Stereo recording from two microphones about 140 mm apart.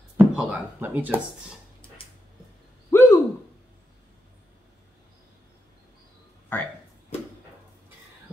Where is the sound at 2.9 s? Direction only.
20° left (ahead or behind).